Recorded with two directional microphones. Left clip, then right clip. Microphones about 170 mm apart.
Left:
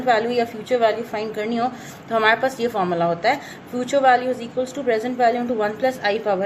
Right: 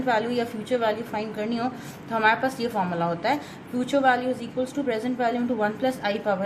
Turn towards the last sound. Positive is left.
turn(degrees=40)  # may be behind; listen again after turning